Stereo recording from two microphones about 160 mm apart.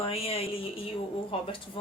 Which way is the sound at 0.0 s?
35° left (ahead or behind).